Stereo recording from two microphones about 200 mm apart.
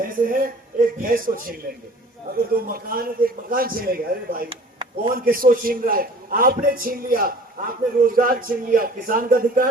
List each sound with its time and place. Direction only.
0.0 s a man's voice: 45° right (ahead or behind)
4.4 s a sound: 25° right (ahead or behind)
5.1 s a man's voice: 45° right (ahead or behind)